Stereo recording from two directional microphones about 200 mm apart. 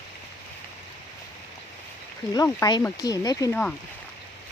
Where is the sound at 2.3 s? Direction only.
15° left (ahead or behind).